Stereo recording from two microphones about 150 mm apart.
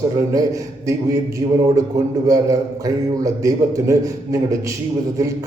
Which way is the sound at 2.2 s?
20° right (ahead or behind).